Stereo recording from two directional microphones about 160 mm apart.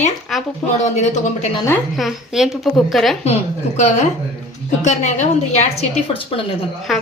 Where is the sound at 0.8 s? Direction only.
50° left (ahead or behind).